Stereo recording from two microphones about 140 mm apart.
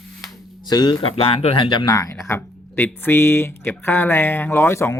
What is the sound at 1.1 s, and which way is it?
Speech, 45° left (ahead or behind).